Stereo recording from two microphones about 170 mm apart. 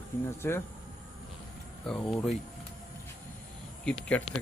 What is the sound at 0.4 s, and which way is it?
Speech, 15° left (ahead or behind).